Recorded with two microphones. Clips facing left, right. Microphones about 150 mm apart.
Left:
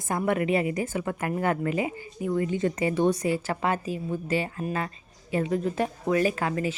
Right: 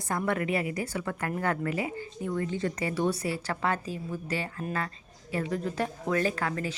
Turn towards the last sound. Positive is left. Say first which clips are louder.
# left 4 dB
turn(degrees=15)  # may be behind; listen again after turning